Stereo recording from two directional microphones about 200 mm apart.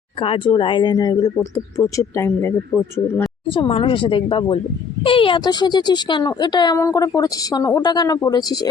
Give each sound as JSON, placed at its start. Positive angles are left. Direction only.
{"t": 0.2, "sound": "speech", "side_deg": 25}
{"t": 2.7, "sound": "speech", "side_deg": -5}
{"t": 3.5, "sound": "speech", "side_deg": 25}